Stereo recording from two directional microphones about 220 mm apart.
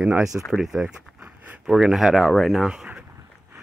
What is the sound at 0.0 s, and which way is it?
Speech, 5° right (ahead or behind).